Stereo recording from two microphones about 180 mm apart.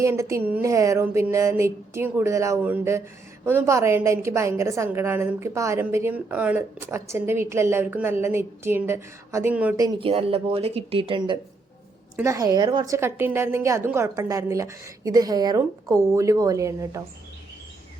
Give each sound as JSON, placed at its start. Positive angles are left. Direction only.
{"t": 0.0, "sound": "a woman's voice", "side_deg": -15}
{"t": 9.8, "sound": "speech", "side_deg": -30}
{"t": 12.1, "sound": "a woman's voice", "side_deg": -15}